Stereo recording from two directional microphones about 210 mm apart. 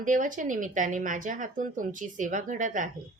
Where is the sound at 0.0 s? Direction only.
40° right (ahead or behind).